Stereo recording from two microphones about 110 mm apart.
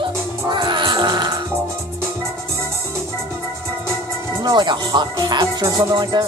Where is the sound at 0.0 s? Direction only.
45° right (ahead or behind).